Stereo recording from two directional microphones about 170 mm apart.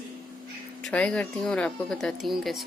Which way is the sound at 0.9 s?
5° left (ahead or behind).